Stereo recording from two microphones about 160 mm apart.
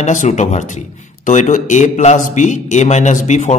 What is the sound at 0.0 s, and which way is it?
A man's voice, 50° left (ahead or behind).